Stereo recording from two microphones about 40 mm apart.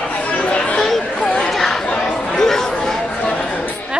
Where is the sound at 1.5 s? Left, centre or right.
Centre.